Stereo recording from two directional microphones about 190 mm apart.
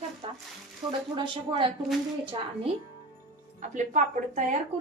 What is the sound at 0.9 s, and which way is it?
A woman's voice, 25° right (ahead or behind).